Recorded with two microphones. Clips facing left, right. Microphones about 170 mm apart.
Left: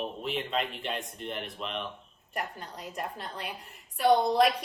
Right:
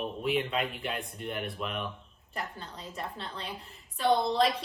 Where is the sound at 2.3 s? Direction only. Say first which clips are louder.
Left 2 dB; 15° left (ahead or behind).